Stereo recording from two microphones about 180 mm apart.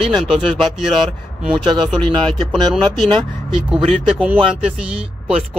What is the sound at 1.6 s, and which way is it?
Speech, 25° right (ahead or behind).